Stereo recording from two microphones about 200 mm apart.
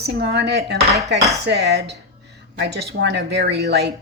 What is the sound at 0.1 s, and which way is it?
A woman's voice, 55° right (ahead or behind).